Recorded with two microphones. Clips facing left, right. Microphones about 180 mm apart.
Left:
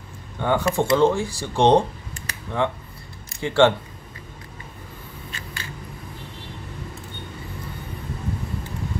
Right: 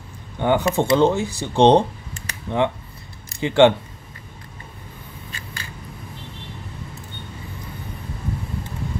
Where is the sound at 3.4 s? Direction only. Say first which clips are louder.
Right 3 dB; 15° right (ahead or behind).